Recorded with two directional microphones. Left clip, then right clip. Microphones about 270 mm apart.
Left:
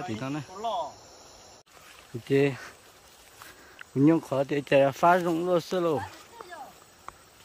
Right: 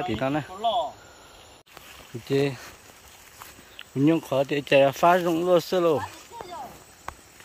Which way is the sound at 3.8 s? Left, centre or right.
Centre.